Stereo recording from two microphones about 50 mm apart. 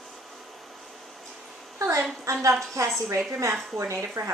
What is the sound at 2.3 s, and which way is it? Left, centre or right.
Speech, right.